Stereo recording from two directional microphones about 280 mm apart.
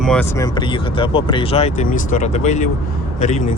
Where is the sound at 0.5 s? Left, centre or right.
Centre.